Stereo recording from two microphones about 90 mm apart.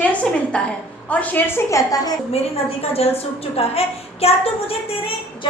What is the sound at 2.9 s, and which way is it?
A woman's voice, 90° left.